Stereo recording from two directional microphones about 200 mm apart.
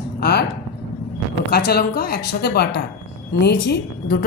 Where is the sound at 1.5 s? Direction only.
50° left (ahead or behind).